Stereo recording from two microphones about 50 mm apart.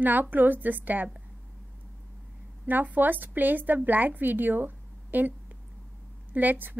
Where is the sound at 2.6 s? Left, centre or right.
Right.